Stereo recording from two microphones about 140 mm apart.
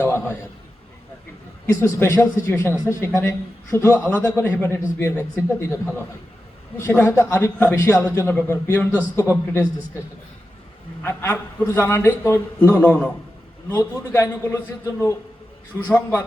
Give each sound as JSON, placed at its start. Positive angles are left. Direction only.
{"t": 0.0, "sound": "a sound", "side_deg": 15}
{"t": 1.6, "sound": "a man's voice", "side_deg": 20}
{"t": 11.0, "sound": "a man's voice", "side_deg": 15}